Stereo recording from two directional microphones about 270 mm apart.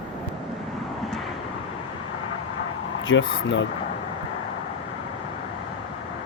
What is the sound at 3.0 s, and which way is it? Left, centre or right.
Speech, left.